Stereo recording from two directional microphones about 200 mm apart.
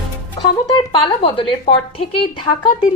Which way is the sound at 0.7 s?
25° left (ahead or behind).